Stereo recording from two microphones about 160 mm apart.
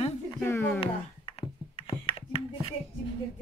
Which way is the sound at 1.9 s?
35° left (ahead or behind).